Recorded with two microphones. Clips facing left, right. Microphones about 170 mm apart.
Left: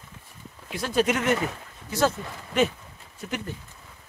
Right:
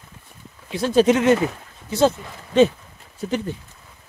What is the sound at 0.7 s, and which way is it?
Speech, 25° right (ahead or behind).